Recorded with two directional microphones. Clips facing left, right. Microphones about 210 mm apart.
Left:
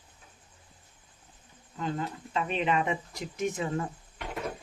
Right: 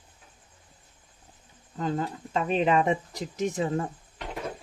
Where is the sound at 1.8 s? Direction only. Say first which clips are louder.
Right 4 dB; 40° right (ahead or behind).